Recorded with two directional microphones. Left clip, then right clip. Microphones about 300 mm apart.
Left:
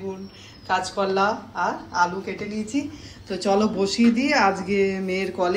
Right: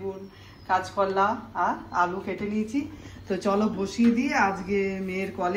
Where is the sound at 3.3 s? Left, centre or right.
Centre.